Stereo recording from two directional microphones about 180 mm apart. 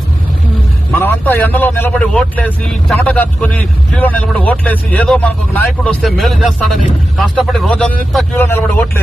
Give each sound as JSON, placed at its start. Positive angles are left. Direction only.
{"t": 0.9, "sound": "a man's voice", "side_deg": 10}